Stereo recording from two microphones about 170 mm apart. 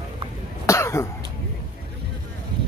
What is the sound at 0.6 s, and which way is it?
Cough, 15° left (ahead or behind).